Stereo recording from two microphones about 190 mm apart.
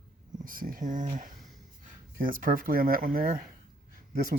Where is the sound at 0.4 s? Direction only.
45° right (ahead or behind).